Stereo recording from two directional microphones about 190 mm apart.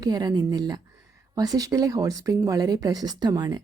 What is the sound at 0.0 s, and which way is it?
Speech, 20° right (ahead or behind).